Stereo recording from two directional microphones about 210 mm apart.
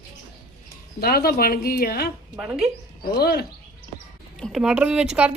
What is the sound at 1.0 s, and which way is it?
Speech, 45° left (ahead or behind).